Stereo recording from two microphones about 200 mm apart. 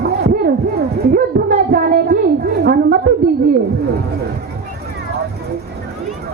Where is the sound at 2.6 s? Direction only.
50° right (ahead or behind).